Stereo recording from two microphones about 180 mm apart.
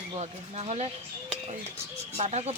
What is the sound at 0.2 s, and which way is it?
Speech, 35° right (ahead or behind).